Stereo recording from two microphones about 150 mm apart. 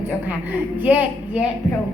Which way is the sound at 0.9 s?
10° right (ahead or behind).